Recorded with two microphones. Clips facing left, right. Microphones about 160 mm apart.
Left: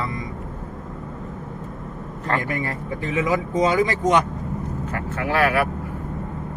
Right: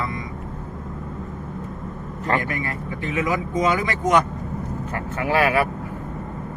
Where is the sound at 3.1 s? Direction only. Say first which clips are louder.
Left 2 dB; 30° left (ahead or behind).